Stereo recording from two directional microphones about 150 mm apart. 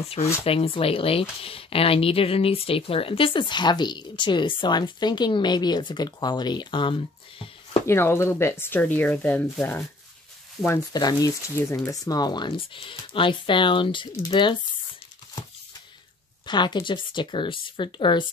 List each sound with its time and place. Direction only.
0.5 s speech: 40° left (ahead or behind)
7.8 s speech: 15° left (ahead or behind); by 14.6 s 30° left (ahead or behind)
16.4 s speech: 30° left (ahead or behind)